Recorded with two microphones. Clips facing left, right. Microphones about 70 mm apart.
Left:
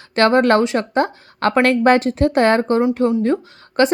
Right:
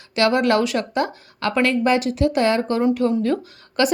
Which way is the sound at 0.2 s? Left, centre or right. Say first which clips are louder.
Left 4 dB; left.